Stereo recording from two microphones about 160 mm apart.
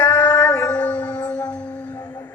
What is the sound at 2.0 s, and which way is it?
Music, 20° left (ahead or behind).